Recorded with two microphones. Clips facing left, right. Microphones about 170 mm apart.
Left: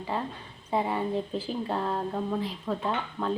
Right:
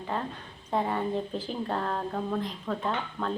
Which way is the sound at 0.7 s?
5° left (ahead or behind).